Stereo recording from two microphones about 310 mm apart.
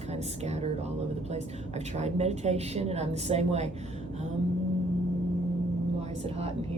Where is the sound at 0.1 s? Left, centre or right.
Right.